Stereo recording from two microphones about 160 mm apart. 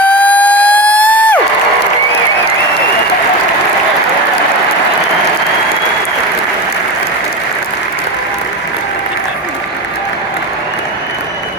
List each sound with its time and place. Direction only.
0.0 s siren: 10° left (ahead or behind)